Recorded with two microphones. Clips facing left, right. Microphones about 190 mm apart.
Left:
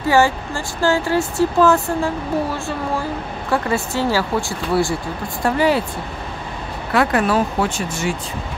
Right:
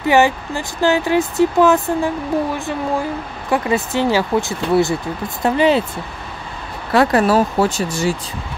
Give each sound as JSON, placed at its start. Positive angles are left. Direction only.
{"t": 0.0, "sound": "speech", "side_deg": -20}
{"t": 6.9, "sound": "speech", "side_deg": -35}